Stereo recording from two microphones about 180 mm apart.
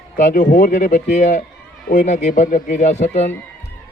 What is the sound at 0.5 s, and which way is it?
A man's voice, 50° left (ahead or behind).